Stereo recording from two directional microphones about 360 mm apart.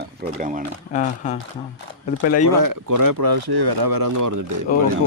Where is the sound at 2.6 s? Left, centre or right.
Right.